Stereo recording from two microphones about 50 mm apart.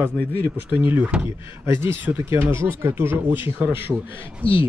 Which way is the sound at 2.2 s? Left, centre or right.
Right.